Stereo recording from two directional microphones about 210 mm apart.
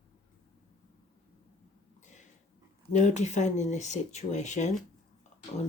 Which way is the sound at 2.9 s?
35° left (ahead or behind).